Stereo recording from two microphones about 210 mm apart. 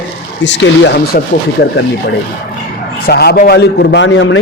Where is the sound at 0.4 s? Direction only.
55° left (ahead or behind).